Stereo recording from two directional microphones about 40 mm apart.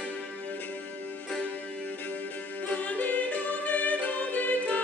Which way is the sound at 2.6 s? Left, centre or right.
Left.